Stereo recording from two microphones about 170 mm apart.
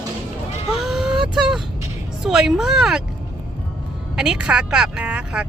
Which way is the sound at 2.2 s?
5° right (ahead or behind).